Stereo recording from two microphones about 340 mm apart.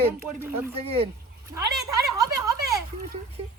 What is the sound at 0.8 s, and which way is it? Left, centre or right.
Speech, centre.